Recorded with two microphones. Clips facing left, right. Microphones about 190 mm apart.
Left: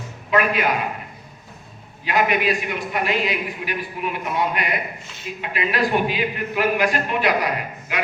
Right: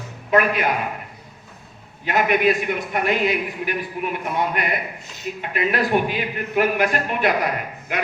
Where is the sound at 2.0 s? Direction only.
50° right (ahead or behind).